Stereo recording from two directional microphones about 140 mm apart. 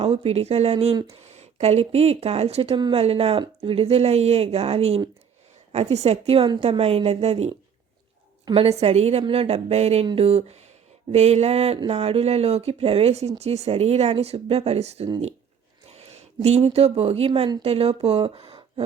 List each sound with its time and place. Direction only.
0.0 s speech: 45° right (ahead or behind)
8.5 s speech: 45° right (ahead or behind)